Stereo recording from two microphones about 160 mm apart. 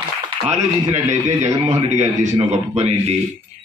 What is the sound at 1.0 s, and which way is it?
A man's voice, 50° right (ahead or behind).